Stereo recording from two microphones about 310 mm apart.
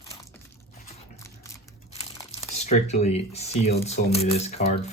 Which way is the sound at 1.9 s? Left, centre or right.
Left.